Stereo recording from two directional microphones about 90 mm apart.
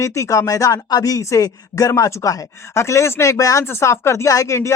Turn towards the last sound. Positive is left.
turn(degrees=35)  # may be behind; listen again after turning